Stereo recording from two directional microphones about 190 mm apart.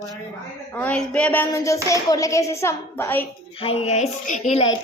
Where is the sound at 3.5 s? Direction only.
30° left (ahead or behind).